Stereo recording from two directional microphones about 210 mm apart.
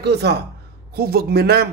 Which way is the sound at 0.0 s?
50° right (ahead or behind).